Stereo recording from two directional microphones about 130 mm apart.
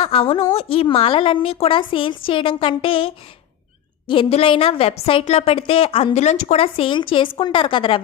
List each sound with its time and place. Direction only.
0.0 s a woman's voice: 45° left (ahead or behind)